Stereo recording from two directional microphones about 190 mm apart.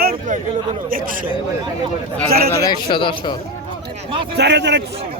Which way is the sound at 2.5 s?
20° left (ahead or behind).